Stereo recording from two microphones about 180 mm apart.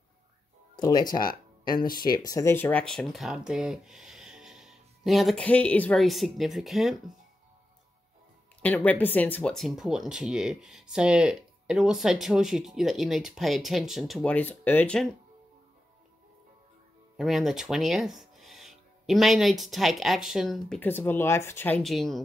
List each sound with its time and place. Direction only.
0.7 s speech: 20° left (ahead or behind); by 7.0 s centre (ahead or behind)
8.6 s speech: 10° left (ahead or behind)
17.2 s speech: centre (ahead or behind)